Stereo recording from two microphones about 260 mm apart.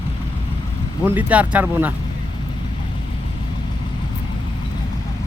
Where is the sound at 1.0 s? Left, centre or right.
Centre.